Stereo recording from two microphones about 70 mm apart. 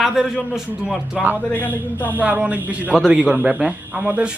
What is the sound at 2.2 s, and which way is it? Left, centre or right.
A man's voice, right.